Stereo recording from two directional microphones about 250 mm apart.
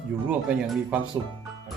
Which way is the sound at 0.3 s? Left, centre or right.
Centre.